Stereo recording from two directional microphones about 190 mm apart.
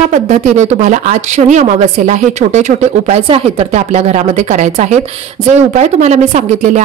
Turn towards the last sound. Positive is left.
turn(degrees=-40)  # may be behind; listen again after turning